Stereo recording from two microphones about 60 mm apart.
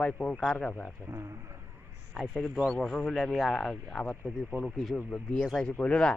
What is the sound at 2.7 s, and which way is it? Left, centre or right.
Speech, centre.